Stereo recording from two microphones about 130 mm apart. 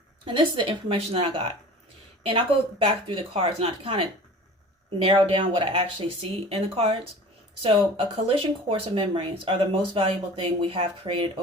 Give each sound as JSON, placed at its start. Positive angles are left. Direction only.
{"t": 0.3, "sound": "speech", "side_deg": -40}
{"t": 5.0, "sound": "speech", "side_deg": -40}